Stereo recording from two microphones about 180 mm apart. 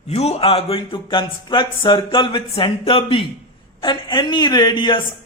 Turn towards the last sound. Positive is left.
turn(degrees=25)  # may be behind; listen again after turning